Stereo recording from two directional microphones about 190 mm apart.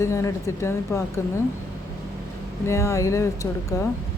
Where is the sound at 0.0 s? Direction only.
15° left (ahead or behind).